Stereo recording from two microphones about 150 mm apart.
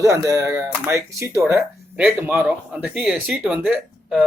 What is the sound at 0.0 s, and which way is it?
Speech, 20° right (ahead or behind).